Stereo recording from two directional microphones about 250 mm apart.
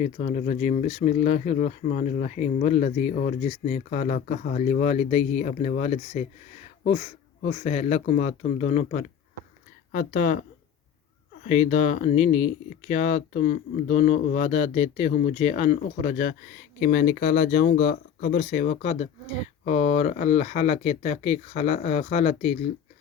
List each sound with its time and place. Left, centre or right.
0.0 s speech: left
11.4 s speech: left